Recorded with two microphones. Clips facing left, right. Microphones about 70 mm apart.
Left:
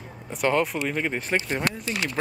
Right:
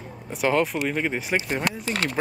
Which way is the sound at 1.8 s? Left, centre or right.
Right.